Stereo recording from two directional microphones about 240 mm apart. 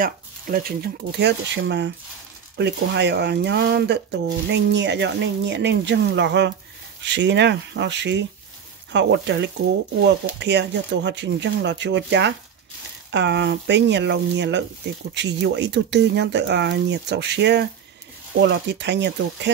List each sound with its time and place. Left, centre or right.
0.0 s speech: right